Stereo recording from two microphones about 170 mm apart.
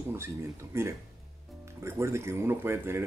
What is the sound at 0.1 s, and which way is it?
Speech, 15° right (ahead or behind).